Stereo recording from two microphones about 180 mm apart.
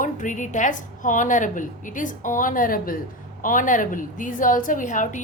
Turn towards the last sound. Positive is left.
turn(degrees=45)  # may be behind; listen again after turning